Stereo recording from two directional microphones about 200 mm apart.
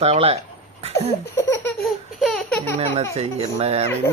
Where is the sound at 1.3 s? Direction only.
15° left (ahead or behind).